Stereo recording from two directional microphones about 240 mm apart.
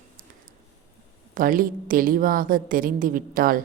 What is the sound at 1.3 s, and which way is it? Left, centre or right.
A man's voice, right.